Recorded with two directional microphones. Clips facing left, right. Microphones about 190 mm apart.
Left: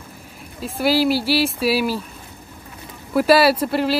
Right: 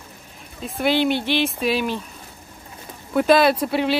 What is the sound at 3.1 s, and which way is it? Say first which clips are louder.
Speech: left 1 dB; 5° left (ahead or behind).